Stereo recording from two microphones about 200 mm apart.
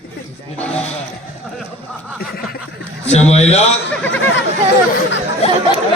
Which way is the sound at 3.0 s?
35° left (ahead or behind).